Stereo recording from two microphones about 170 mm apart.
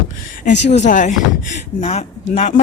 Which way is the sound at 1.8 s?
40° left (ahead or behind).